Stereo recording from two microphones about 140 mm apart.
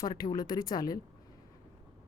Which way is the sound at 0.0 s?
30° left (ahead or behind).